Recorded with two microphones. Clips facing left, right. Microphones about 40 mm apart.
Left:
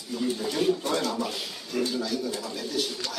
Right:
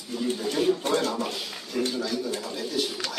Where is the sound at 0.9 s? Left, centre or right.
Right.